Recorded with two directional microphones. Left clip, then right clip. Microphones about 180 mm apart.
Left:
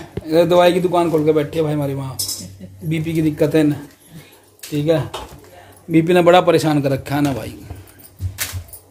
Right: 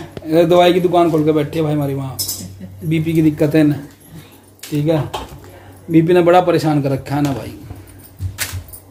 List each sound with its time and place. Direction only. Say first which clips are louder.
0.3 s a man's voice: right 1 dB; 5° left (ahead or behind)
4.7 s a man's voice: even; 15° left (ahead or behind)